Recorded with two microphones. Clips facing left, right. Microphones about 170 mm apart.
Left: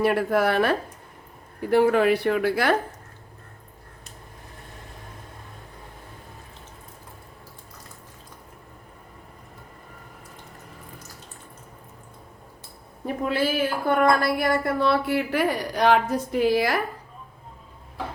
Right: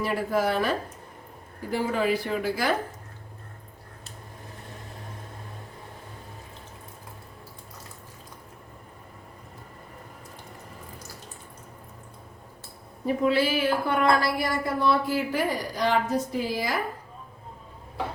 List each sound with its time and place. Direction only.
0.0 s a woman's voice: 65° left (ahead or behind)
13.2 s a woman's voice: 50° left (ahead or behind); by 16.7 s 65° left (ahead or behind)